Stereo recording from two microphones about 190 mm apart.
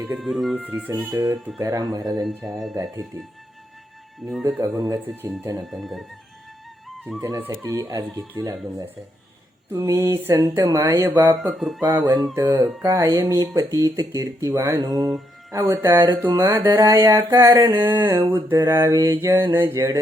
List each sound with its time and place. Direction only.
0.0 s speech: 5° right (ahead or behind)
1.1 s speech: 20° right (ahead or behind)
4.2 s speech: centre (ahead or behind)
4.6 s speech: 20° right (ahead or behind)
5.6 s speech: centre (ahead or behind)
6.8 s music: centre (ahead or behind)
7.2 s speech: 15° right (ahead or behind)
11.5 s speech: centre (ahead or behind)
11.8 s speech: 20° right (ahead or behind)
15.0 s mantra: centre (ahead or behind)
15.5 s speech: 20° right (ahead or behind)